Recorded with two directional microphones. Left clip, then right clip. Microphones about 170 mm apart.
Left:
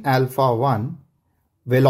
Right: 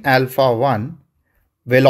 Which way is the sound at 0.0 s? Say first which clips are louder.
Right 4 dB; 15° right (ahead or behind).